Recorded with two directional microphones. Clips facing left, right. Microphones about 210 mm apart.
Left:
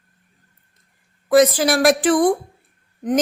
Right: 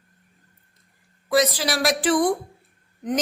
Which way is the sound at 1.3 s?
50° left (ahead or behind).